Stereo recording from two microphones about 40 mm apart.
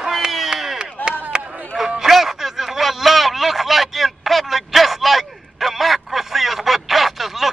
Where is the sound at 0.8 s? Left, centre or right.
Right.